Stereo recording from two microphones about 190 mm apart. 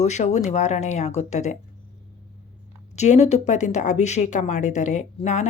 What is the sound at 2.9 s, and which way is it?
A woman's voice, 35° left (ahead or behind).